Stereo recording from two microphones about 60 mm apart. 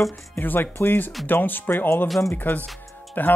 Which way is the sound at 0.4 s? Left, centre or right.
Left.